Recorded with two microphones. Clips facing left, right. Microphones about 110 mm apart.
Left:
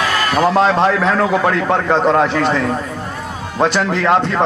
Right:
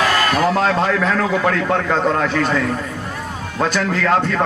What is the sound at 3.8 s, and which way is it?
Speech, 35° left (ahead or behind).